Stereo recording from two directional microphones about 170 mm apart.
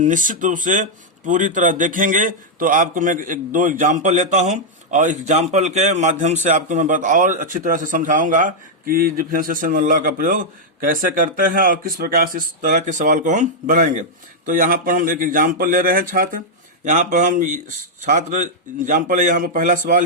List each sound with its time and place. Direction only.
0.0 s speech: 50° right (ahead or behind)